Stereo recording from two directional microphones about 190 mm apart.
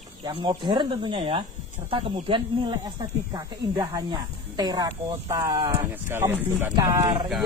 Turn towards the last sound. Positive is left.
turn(degrees=-15)  # may be behind; listen again after turning